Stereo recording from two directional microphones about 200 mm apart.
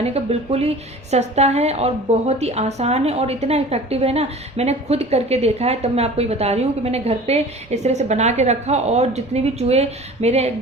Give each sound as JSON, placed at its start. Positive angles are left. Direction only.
{"t": 0.0, "sound": "speech", "side_deg": -30}